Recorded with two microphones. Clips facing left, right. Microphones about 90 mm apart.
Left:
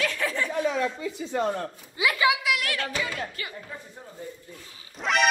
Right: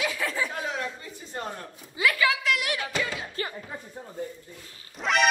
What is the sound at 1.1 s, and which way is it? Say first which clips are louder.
Speech: left 9 dB; 85° left.